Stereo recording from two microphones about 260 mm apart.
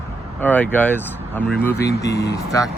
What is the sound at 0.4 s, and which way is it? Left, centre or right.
Speech, centre.